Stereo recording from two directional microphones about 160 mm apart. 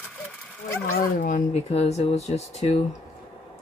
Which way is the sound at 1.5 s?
40° left (ahead or behind).